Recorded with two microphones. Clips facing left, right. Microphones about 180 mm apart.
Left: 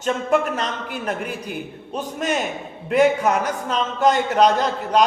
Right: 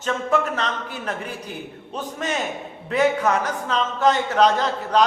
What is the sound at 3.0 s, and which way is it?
A man's voice, 10° left (ahead or behind).